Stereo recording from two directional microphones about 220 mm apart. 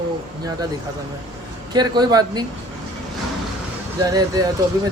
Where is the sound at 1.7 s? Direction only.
20° right (ahead or behind).